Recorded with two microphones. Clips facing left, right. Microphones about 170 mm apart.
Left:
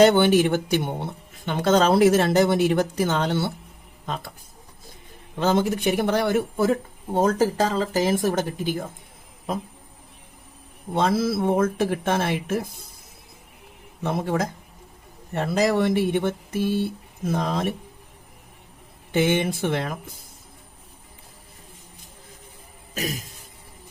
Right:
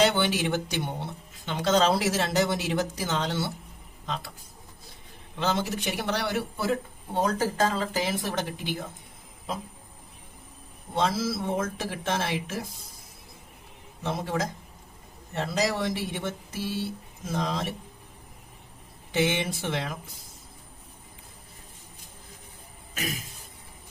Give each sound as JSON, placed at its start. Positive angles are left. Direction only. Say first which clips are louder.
{"t": 0.0, "sound": "speech", "louder": "left 8 dB", "side_deg": 50}
{"t": 5.4, "sound": "speech", "louder": "left 7 dB", "side_deg": 50}
{"t": 10.9, "sound": "speech", "louder": "left 5 dB", "side_deg": 55}
{"t": 14.0, "sound": "speech", "louder": "left 5 dB", "side_deg": 55}
{"t": 19.1, "sound": "speech", "louder": "left 5 dB", "side_deg": 50}
{"t": 23.0, "sound": "a sound", "louder": "left 5 dB", "side_deg": 40}